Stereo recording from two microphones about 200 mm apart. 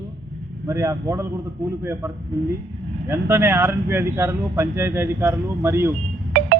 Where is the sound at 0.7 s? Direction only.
15° right (ahead or behind).